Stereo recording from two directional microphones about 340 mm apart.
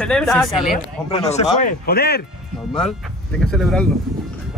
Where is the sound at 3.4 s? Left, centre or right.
Centre.